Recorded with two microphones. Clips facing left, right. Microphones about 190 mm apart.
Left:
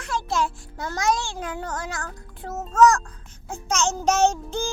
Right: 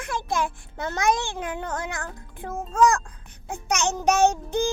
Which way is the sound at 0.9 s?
55° right (ahead or behind).